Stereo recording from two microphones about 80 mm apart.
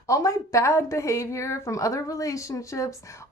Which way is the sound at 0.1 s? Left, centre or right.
Left.